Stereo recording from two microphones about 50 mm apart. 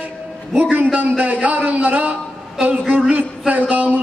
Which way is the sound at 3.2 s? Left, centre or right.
Right.